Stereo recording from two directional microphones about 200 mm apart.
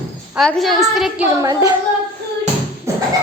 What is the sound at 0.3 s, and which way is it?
Speech, centre (ahead or behind).